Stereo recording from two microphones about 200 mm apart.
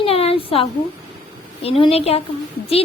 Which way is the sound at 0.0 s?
30° left (ahead or behind).